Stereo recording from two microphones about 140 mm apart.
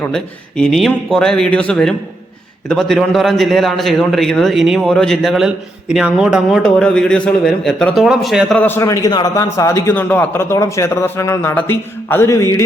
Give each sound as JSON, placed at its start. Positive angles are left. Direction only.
{"t": 0.0, "sound": "a man's voice", "side_deg": 5}
{"t": 8.6, "sound": "a man's voice", "side_deg": 20}